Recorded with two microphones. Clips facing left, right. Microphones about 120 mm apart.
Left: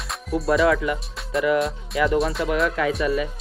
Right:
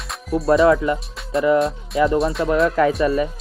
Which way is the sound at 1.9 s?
35° right (ahead or behind).